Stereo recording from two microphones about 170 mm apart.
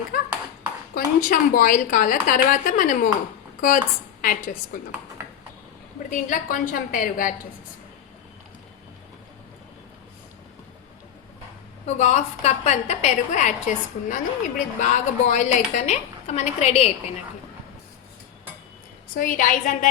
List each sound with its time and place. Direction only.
0.9 s a woman's voice: 55° left (ahead or behind)
4.2 s a woman's voice: 55° left (ahead or behind)
6.1 s a woman's voice: 50° left (ahead or behind)
11.9 s a woman's voice: 40° left (ahead or behind)
19.1 s a woman's voice: 55° left (ahead or behind)